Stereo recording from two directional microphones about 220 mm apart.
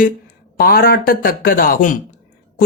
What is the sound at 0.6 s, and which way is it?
Speech, 40° left (ahead or behind).